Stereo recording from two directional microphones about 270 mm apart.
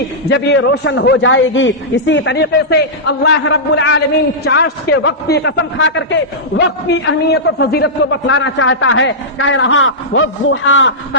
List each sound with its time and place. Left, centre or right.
0.3 s a man's voice: left